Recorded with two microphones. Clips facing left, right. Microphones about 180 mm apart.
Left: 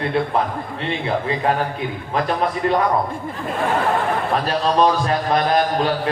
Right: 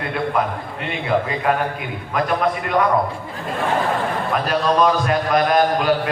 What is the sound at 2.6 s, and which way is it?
Speech, 30° left (ahead or behind).